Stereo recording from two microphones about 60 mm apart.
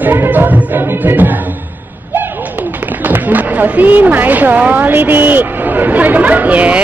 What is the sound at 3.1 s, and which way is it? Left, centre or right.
A woman's voice, right.